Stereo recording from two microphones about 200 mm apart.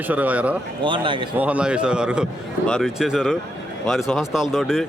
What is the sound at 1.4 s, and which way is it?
Speech, 5° right (ahead or behind).